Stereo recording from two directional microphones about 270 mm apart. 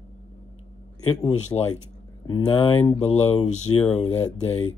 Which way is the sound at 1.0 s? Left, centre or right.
Centre.